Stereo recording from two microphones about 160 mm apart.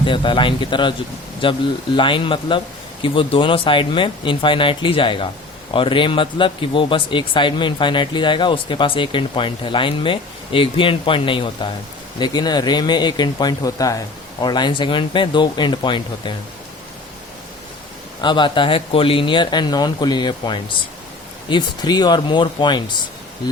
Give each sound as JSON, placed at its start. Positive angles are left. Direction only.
{"t": 0.0, "sound": "speech", "side_deg": 30}
{"t": 18.2, "sound": "speech", "side_deg": 30}